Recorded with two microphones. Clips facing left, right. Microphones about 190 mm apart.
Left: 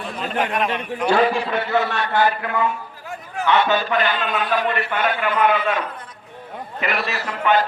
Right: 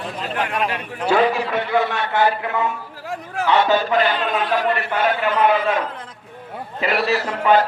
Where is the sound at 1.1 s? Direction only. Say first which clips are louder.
Right 1 dB; 5° right (ahead or behind).